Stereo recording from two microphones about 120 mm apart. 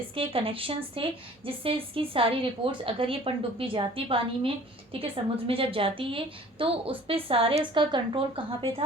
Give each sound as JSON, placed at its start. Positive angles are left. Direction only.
{"t": 0.2, "sound": "speech", "side_deg": -50}